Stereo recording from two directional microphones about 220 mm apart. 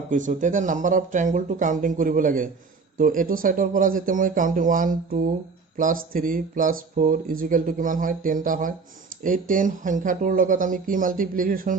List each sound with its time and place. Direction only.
0.1 s speech: 35° right (ahead or behind)